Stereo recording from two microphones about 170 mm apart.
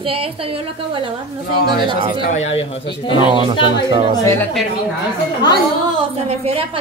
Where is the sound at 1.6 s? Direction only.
30° right (ahead or behind).